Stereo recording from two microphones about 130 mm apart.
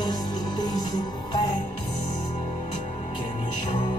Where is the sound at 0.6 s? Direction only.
30° left (ahead or behind).